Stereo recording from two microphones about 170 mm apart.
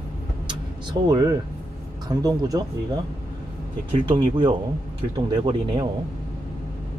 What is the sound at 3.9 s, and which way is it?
Speech, 30° right (ahead or behind).